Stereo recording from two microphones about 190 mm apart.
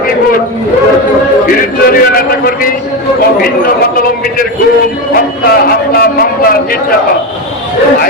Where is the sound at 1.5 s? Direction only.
50° left (ahead or behind).